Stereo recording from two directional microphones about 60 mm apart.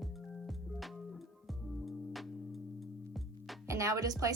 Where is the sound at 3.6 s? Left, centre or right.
Right.